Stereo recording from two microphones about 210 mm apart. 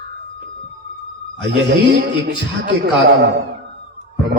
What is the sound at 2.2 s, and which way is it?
Speech, 55° right (ahead or behind).